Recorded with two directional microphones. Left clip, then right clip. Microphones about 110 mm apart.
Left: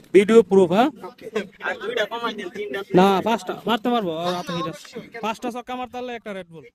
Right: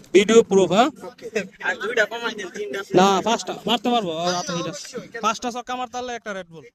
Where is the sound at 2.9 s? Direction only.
90° left.